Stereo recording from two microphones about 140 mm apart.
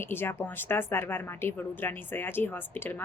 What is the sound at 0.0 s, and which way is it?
A woman's voice, 15° left (ahead or behind).